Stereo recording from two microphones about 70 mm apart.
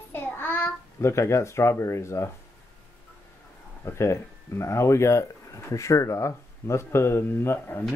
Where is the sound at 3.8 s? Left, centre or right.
Left.